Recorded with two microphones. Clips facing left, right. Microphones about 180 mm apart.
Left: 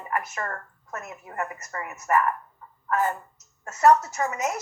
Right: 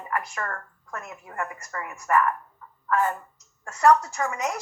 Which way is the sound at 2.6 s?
30° left (ahead or behind).